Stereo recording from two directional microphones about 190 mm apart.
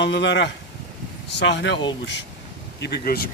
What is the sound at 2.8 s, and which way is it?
Speech, 60° left (ahead or behind).